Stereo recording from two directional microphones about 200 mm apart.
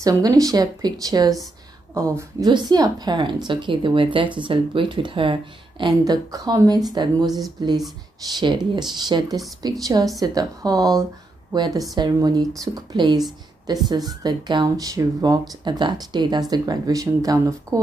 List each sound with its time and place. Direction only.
0.0 s speech: 15° right (ahead or behind)